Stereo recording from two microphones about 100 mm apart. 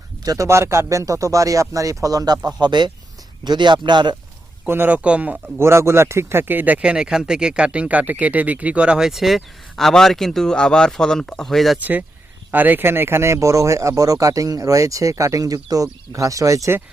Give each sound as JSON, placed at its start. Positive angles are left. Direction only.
{"t": 0.3, "sound": "speech", "side_deg": -30}
{"t": 4.6, "sound": "speech", "side_deg": -20}
{"t": 5.5, "sound": "speech", "side_deg": -25}
{"t": 11.8, "sound": "speech", "side_deg": -15}